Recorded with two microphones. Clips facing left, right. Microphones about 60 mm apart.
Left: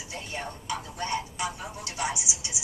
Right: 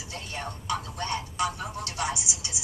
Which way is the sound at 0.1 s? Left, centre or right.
Centre.